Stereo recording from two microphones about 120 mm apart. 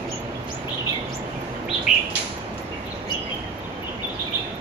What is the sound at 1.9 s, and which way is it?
Bird, 10° right (ahead or behind).